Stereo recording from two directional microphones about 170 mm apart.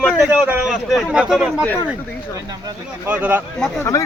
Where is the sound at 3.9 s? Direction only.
20° left (ahead or behind).